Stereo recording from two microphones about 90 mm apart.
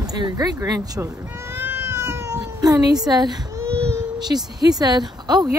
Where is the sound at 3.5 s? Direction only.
30° right (ahead or behind).